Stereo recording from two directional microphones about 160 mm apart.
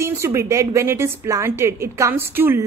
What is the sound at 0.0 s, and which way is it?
A woman's voice, 15° right (ahead or behind).